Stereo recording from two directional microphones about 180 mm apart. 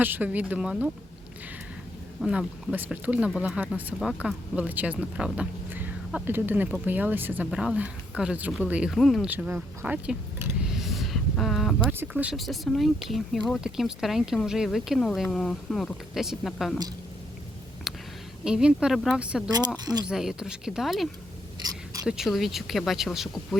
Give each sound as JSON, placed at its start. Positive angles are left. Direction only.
{"t": 0.0, "sound": "speech", "side_deg": -10}
{"t": 2.2, "sound": "speech", "side_deg": -5}
{"t": 10.6, "sound": "a sound", "side_deg": 0}
{"t": 11.9, "sound": "speech", "side_deg": -10}
{"t": 18.4, "sound": "speech", "side_deg": -5}
{"t": 19.5, "sound": "speech", "side_deg": -20}
{"t": 20.1, "sound": "speech", "side_deg": -5}